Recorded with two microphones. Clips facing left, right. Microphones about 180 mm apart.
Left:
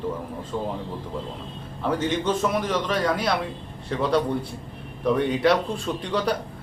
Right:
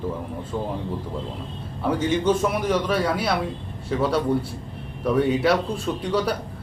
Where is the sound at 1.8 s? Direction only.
10° right (ahead or behind).